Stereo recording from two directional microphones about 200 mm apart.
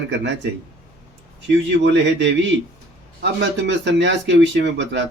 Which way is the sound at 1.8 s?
60° right (ahead or behind).